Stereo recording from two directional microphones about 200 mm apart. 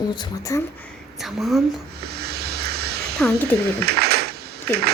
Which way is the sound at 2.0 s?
50° right (ahead or behind).